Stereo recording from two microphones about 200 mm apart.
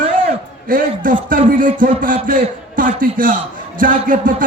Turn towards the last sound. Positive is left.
turn(degrees=-40)  # may be behind; listen again after turning